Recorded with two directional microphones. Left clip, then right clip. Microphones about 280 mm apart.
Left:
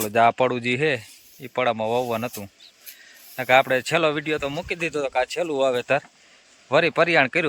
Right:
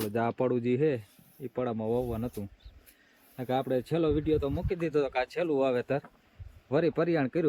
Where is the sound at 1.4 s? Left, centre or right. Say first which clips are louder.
Left 10 dB; left.